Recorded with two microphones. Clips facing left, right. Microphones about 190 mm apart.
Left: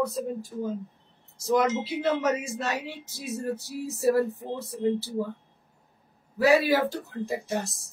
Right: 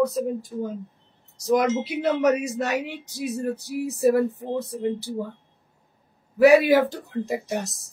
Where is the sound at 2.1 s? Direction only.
20° right (ahead or behind).